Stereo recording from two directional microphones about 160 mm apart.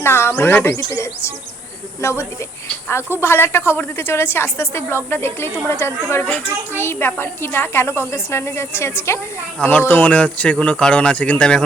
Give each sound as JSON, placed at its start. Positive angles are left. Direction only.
{"t": 0.0, "sound": "speech", "side_deg": 15}